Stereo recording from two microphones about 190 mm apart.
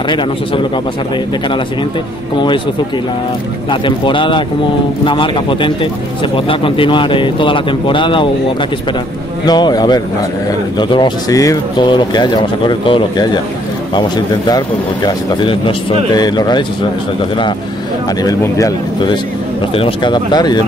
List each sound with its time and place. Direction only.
2.3 s speech: 25° left (ahead or behind)
3.8 s speech: 25° left (ahead or behind)
9.5 s speech: 20° left (ahead or behind)
18.2 s speech: 20° left (ahead or behind)